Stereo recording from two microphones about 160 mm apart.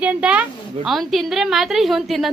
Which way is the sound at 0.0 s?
10° right (ahead or behind).